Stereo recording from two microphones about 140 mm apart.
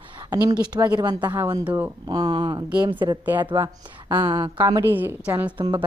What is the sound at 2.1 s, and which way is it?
A woman's voice, 30° right (ahead or behind).